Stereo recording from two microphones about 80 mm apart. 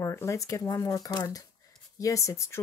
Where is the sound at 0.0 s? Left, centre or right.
Left.